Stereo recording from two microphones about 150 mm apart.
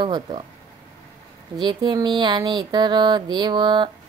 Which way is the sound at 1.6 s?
30° right (ahead or behind).